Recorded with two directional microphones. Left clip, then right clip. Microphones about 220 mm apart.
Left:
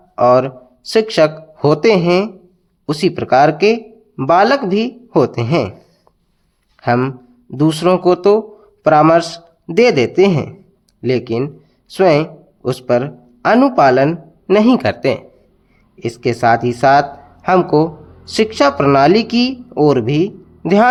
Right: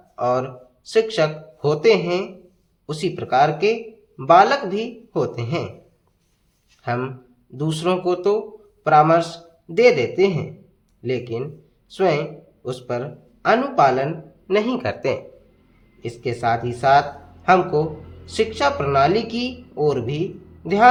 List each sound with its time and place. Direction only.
0.2 s speech: 40° left (ahead or behind)
6.8 s a man's voice: 35° left (ahead or behind)
16.0 s speech: 40° left (ahead or behind)